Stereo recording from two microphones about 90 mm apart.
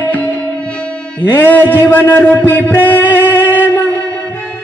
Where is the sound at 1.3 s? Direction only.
25° left (ahead or behind).